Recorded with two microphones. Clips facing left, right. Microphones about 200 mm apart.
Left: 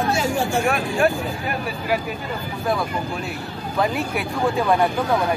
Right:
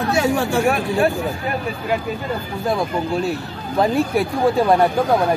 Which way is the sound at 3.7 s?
35° right (ahead or behind).